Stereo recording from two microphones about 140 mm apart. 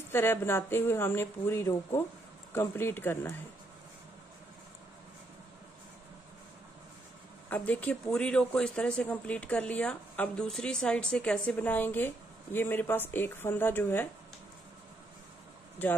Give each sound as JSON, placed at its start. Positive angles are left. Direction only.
{"t": 0.1, "sound": "speech", "side_deg": 15}
{"t": 7.4, "sound": "speech", "side_deg": 10}